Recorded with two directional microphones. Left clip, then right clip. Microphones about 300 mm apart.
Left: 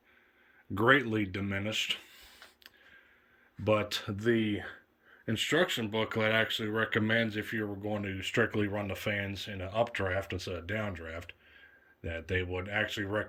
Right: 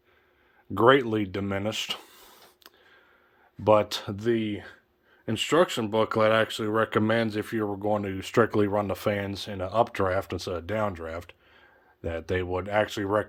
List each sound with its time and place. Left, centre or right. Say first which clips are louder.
0.7 s speech: right 6 dB; centre; by 2.7 s right
3.6 s speech: right 8 dB; centre